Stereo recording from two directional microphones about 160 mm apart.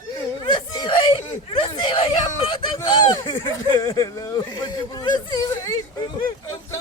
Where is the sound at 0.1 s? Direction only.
30° left (ahead or behind).